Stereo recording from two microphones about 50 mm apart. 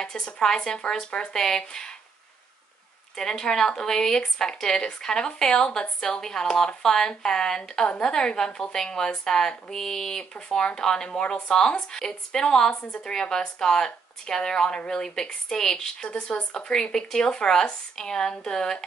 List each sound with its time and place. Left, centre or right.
0.0 s speech: centre
3.2 s speech: centre